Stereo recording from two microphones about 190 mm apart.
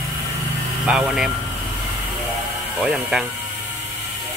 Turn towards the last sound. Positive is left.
turn(degrees=-5)  # may be behind; listen again after turning